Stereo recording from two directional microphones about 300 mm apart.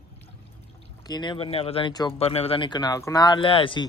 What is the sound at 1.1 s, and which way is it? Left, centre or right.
Speech, centre.